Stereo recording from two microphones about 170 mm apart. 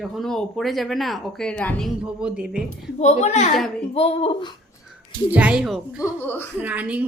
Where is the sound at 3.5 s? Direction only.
Centre (ahead or behind).